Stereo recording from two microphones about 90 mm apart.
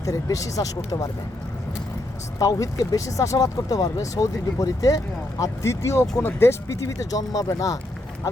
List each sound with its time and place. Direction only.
0.0 s speech: 40° left (ahead or behind)
2.4 s speech: 40° left (ahead or behind)